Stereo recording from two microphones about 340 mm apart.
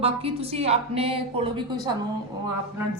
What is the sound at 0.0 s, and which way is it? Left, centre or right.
A woman's voice, centre.